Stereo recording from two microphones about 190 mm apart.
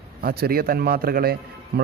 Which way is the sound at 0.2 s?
55° right (ahead or behind).